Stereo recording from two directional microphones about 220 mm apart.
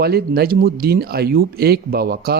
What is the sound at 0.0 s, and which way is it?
Speech, 45° right (ahead or behind).